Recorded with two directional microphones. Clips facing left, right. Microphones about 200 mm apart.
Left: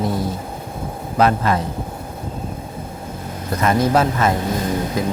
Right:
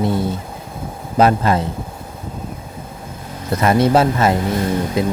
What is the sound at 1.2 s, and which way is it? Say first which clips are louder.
Speech: right 3 dB; 30° right (ahead or behind).